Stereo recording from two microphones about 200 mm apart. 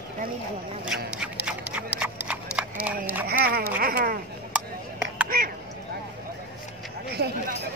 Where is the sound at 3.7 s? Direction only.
45° right (ahead or behind).